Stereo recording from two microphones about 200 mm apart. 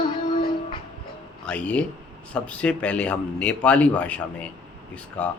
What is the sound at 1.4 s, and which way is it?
A man's voice, 5° left (ahead or behind).